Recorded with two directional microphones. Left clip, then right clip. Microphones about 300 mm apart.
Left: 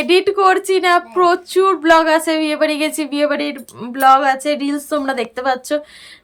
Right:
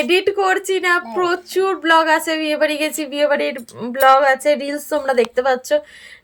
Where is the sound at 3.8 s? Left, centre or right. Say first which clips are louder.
Left 1 dB; centre.